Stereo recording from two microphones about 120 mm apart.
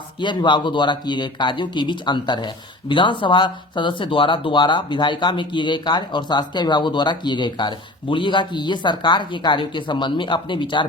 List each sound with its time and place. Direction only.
0.2 s speech: 40° left (ahead or behind)